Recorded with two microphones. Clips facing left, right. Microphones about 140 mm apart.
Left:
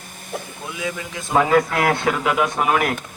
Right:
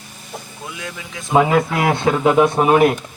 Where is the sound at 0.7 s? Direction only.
Centre (ahead or behind).